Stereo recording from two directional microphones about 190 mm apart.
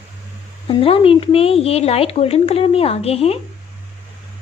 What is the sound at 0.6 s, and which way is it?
Speech, 30° left (ahead or behind).